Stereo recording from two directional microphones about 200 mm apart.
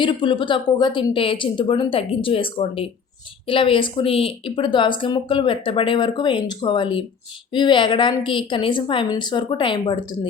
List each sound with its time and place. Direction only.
0.0 s a woman's voice: 25° left (ahead or behind)